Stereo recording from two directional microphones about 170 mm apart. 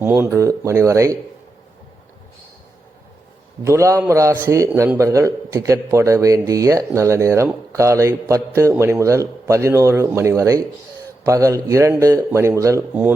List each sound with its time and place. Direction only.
0.0 s a man's voice: 15° right (ahead or behind)
3.6 s a man's voice: 15° right (ahead or behind)